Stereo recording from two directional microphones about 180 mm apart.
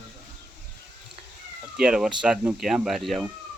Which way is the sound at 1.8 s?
5° right (ahead or behind).